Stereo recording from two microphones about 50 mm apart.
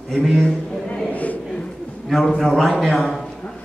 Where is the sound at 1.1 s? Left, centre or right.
Left.